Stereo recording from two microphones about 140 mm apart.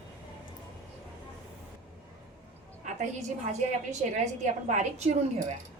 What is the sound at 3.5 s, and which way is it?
A woman's voice, 55° right (ahead or behind).